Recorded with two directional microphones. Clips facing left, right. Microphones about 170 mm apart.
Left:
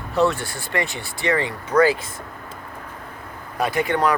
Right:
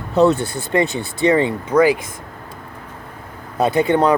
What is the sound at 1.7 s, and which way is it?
Speech, 15° right (ahead or behind).